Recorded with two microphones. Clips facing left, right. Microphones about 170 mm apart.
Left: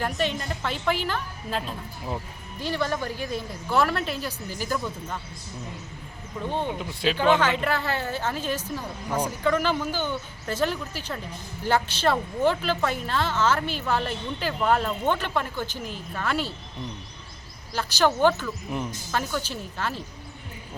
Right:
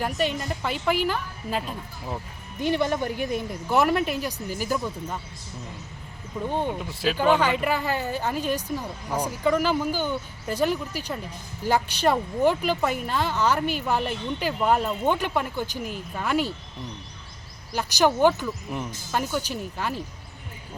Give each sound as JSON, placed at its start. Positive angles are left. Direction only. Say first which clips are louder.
{"t": 0.0, "sound": "speech", "louder": "right 1 dB", "side_deg": -10}
{"t": 2.6, "sound": "speech", "louder": "right 4 dB", "side_deg": -20}
{"t": 6.5, "sound": "speech", "louder": "right 1 dB", "side_deg": -5}
{"t": 17.7, "sound": "speech", "louder": "right 1 dB", "side_deg": -15}